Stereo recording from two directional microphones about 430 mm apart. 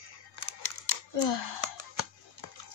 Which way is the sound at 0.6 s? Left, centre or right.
Left.